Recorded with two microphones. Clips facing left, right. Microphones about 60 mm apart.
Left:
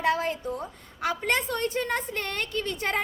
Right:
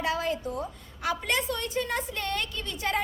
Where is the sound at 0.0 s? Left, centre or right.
Left.